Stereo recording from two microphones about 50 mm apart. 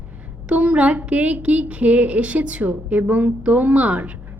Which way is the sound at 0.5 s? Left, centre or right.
Right.